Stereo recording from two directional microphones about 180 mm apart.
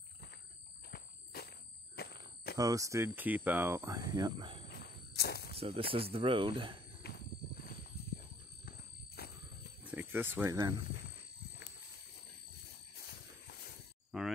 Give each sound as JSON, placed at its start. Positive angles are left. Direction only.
{"t": 0.8, "sound": "squeal", "side_deg": 60}
{"t": 2.0, "sound": "cricket", "side_deg": 60}
{"t": 2.5, "sound": "speech", "side_deg": -20}
{"t": 4.7, "sound": "walk", "side_deg": 65}
{"t": 5.6, "sound": "speech", "side_deg": -30}
{"t": 8.6, "sound": "a sound", "side_deg": 60}
{"t": 9.8, "sound": "speech", "side_deg": -10}
{"t": 14.1, "sound": "a sound", "side_deg": 0}